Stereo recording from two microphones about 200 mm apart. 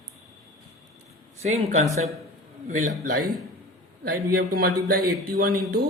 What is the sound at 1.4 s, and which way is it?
Speech, 35° right (ahead or behind).